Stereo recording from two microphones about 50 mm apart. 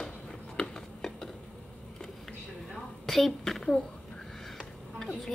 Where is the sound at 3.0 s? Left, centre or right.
Centre.